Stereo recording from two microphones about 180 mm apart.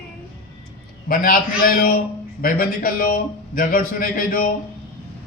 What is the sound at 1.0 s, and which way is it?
A man's voice, 50° left (ahead or behind).